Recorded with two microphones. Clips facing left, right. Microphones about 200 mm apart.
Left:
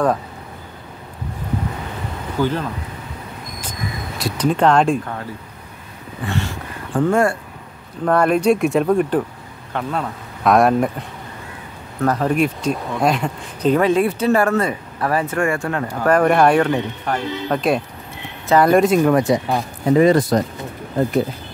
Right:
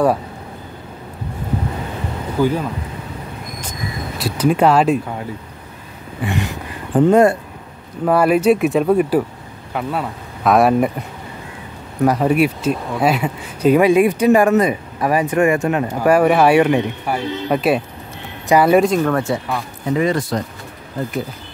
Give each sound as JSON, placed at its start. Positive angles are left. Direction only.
{"t": 2.3, "sound": "speech", "side_deg": -10}
{"t": 4.2, "sound": "speech", "side_deg": -10}
{"t": 6.2, "sound": "speech", "side_deg": -15}
{"t": 8.0, "sound": "speech", "side_deg": -5}
{"t": 12.0, "sound": "speech", "side_deg": -10}
{"t": 18.9, "sound": "speech", "side_deg": 15}
{"t": 19.4, "sound": "speech", "side_deg": 30}